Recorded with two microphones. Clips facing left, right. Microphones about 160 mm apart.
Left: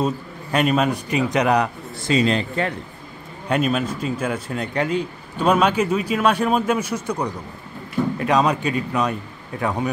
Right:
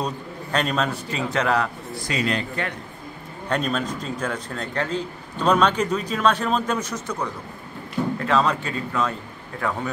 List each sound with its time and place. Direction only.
0.0 s a man's voice: 10° left (ahead or behind)
3.4 s a man's voice: 10° left (ahead or behind)